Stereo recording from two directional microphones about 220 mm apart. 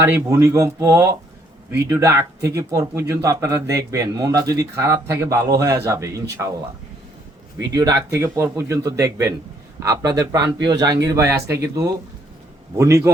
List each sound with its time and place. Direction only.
0.0 s speech: 10° right (ahead or behind)
7.7 s speech: 20° right (ahead or behind)
12.7 s speech: 15° right (ahead or behind)